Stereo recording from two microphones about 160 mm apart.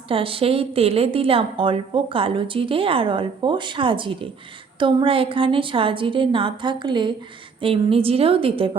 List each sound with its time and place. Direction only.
0.1 s a woman's voice: 35° right (ahead or behind)